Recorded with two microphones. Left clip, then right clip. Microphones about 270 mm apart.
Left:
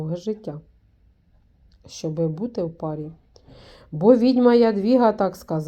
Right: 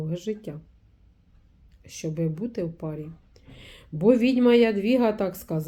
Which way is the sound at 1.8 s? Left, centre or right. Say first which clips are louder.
Left 5 dB; centre.